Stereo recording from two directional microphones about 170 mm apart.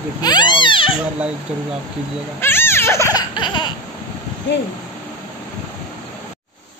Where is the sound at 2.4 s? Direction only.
15° left (ahead or behind).